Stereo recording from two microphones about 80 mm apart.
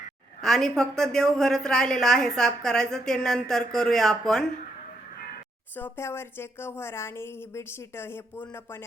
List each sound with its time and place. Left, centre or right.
0.4 s a woman's voice: centre
6.0 s a woman's voice: left